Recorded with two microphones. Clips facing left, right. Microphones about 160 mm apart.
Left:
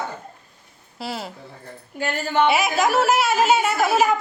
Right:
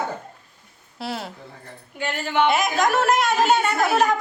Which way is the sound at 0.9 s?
Centre (ahead or behind).